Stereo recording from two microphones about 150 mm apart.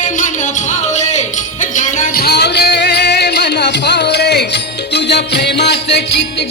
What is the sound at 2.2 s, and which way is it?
Music, 90° left.